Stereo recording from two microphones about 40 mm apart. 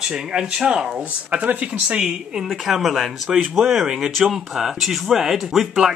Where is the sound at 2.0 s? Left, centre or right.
Centre.